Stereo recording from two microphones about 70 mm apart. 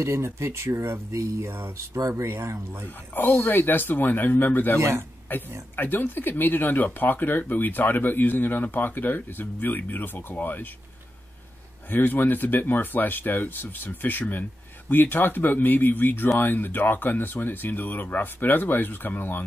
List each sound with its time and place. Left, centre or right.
0.0 s speech: right
3.2 s speech: left
4.7 s speech: right
5.3 s speech: left
11.9 s speech: left